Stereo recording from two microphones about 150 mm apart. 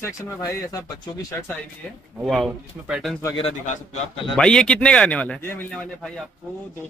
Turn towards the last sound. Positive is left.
turn(degrees=5)  # may be behind; listen again after turning